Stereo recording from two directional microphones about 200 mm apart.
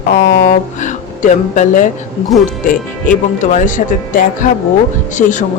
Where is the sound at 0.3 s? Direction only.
40° left (ahead or behind).